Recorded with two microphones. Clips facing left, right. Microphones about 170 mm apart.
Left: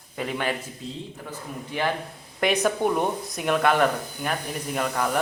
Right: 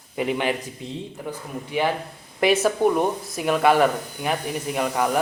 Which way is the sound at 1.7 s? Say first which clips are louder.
Right 3 dB; 10° right (ahead or behind).